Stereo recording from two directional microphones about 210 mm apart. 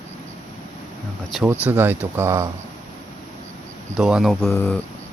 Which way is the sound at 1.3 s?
Centre (ahead or behind).